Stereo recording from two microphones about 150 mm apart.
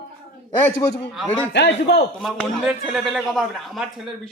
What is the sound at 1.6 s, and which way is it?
Speech, 90° left.